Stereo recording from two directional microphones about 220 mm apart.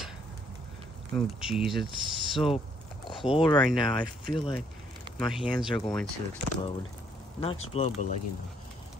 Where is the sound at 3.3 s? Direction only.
20° left (ahead or behind).